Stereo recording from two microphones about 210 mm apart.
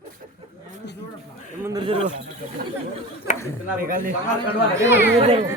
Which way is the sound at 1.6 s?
20° right (ahead or behind).